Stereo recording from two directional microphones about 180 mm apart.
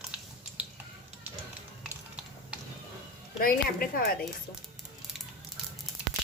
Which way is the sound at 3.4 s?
55° left (ahead or behind).